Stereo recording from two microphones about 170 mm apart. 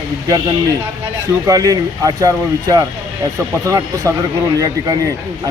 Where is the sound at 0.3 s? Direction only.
20° right (ahead or behind).